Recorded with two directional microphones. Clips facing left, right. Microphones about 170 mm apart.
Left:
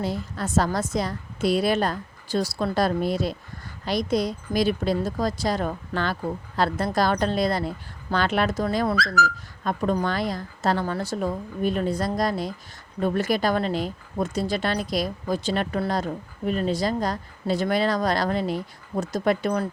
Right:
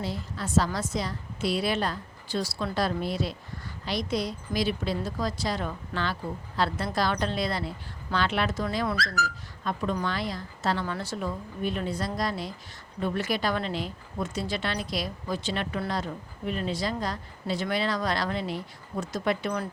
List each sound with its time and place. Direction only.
0.0 s speech: 50° left (ahead or behind)